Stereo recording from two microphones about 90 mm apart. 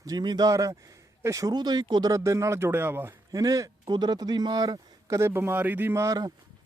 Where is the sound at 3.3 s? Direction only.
40° right (ahead or behind).